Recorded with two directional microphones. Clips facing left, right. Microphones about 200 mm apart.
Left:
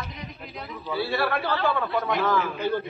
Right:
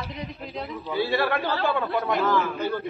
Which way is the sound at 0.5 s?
20° right (ahead or behind).